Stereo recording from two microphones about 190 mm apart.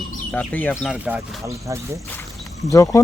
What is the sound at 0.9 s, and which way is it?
Speech, 10° right (ahead or behind).